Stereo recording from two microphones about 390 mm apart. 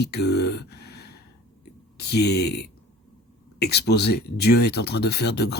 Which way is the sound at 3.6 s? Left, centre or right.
Left.